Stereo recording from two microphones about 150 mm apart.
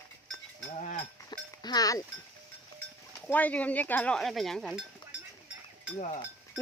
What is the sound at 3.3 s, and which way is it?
Speech, 10° left (ahead or behind).